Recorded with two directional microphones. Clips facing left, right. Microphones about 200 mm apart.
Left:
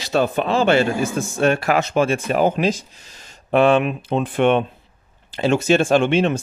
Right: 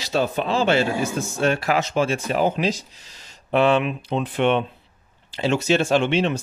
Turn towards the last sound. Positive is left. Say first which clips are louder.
# left 3 dB
turn(degrees=50)  # may be behind; listen again after turning